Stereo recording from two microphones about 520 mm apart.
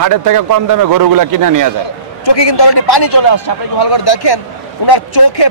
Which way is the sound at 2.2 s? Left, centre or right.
Left.